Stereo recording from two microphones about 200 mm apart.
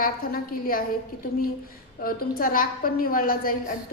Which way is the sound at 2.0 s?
45° left (ahead or behind).